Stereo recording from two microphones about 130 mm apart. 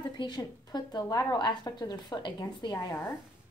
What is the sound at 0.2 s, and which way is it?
A woman's voice, 30° left (ahead or behind).